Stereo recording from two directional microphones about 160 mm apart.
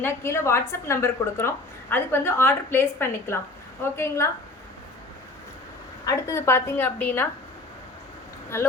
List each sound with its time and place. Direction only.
0.0 s a woman's voice: 15° left (ahead or behind)
6.1 s a woman's voice: 20° left (ahead or behind)
8.5 s a woman's voice: 15° left (ahead or behind)